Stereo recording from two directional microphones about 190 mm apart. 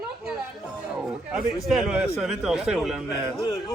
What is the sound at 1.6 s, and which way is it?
Speech, 5° right (ahead or behind).